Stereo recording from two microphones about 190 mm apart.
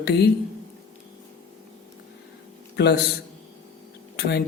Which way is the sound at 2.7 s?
60° left (ahead or behind).